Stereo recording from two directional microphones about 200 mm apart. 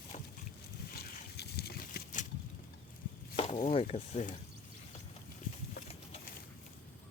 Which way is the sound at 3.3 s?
30° left (ahead or behind).